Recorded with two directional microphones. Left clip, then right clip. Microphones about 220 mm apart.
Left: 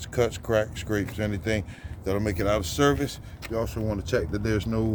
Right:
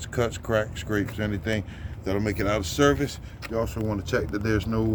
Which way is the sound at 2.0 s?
50° left (ahead or behind).